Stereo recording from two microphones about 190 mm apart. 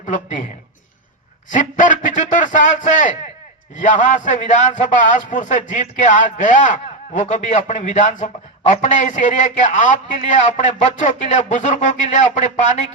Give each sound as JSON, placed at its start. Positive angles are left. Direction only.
{"t": 0.0, "sound": "a man's voice", "side_deg": 40}
{"t": 1.5, "sound": "a man's voice", "side_deg": 40}